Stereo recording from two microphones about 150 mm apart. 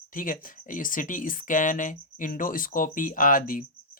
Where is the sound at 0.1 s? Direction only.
65° left (ahead or behind).